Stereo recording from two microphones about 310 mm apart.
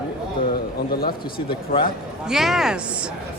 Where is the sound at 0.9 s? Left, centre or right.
Left.